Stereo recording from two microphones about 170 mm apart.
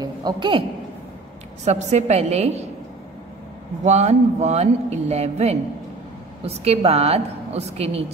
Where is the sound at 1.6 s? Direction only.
40° right (ahead or behind).